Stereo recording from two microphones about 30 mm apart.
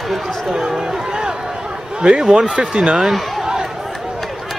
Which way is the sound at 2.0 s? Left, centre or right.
Right.